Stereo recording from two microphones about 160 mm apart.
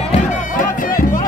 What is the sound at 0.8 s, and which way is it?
Music, 60° left (ahead or behind).